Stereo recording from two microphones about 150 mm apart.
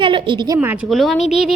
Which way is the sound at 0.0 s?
35° right (ahead or behind).